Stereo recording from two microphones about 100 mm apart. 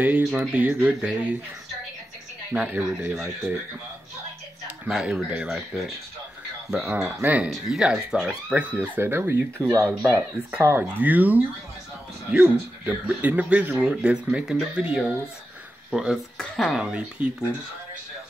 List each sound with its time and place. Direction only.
0.0 s speech: 10° right (ahead or behind)
2.5 s speech: 15° right (ahead or behind)
4.6 s speech: 10° right (ahead or behind)
6.7 s speech: 15° right (ahead or behind)
7.4 s speech: 5° right (ahead or behind)
8.7 s speech: 20° right (ahead or behind)
10.8 s speech: 15° right (ahead or behind)
16.3 s speech: 5° left (ahead or behind)
16.8 s speech: 10° right (ahead or behind)